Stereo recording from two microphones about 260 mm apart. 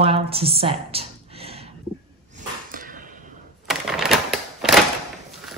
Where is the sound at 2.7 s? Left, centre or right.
Right.